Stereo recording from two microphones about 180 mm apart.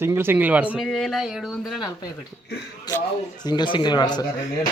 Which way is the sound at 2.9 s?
20° left (ahead or behind).